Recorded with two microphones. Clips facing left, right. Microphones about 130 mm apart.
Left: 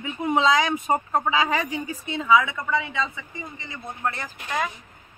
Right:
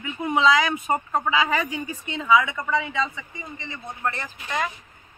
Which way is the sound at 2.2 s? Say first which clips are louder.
Even; centre (ahead or behind).